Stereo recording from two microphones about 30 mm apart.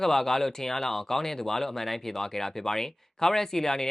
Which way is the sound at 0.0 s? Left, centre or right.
Centre.